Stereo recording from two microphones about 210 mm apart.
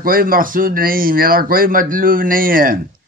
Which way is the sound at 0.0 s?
45° right (ahead or behind).